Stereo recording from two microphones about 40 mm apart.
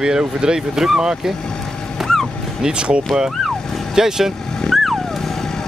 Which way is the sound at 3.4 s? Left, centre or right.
Centre.